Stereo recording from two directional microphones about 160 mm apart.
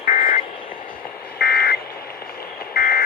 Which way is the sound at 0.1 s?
55° left (ahead or behind).